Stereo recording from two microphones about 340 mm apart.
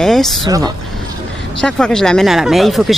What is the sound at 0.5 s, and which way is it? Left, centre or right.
Speech, centre.